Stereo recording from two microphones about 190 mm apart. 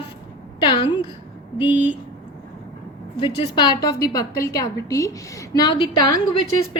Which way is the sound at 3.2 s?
25° left (ahead or behind).